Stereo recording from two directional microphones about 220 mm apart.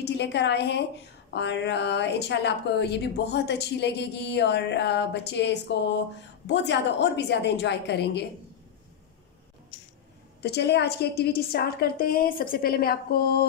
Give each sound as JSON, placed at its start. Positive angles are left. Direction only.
{"t": 0.0, "sound": "speech", "side_deg": 50}
{"t": 10.4, "sound": "speech", "side_deg": 50}